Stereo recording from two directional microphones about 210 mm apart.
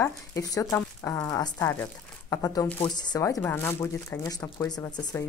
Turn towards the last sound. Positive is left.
turn(degrees=20)  # may be behind; listen again after turning